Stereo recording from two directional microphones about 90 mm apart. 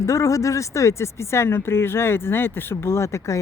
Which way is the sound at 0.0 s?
35° left (ahead or behind).